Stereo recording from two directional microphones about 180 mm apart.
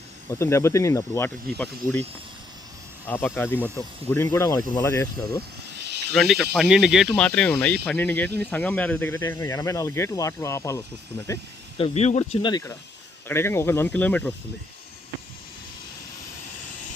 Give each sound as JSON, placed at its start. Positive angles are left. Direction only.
{"t": 0.3, "sound": "speech", "side_deg": 15}
{"t": 3.1, "sound": "speech", "side_deg": 10}
{"t": 6.1, "sound": "speech", "side_deg": 0}
{"t": 11.8, "sound": "speech", "side_deg": 35}